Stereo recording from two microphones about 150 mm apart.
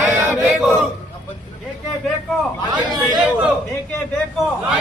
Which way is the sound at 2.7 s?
30° right (ahead or behind).